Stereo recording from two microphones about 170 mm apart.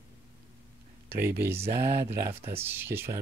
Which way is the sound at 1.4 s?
15° right (ahead or behind).